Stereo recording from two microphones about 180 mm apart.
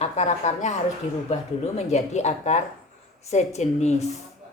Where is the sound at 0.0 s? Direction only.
40° left (ahead or behind).